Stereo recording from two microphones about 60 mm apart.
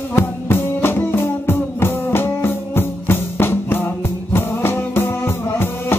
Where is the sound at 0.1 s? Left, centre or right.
Left.